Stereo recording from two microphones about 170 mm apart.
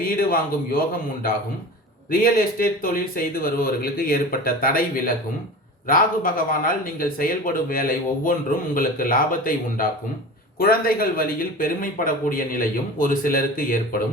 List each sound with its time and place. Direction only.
0.0 s speech: 55° left (ahead or behind)
2.0 s speech: 55° left (ahead or behind)